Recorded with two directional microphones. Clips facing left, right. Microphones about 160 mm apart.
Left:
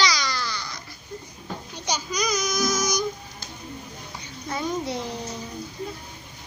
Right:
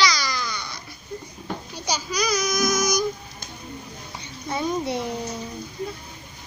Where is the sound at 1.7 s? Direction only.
10° right (ahead or behind).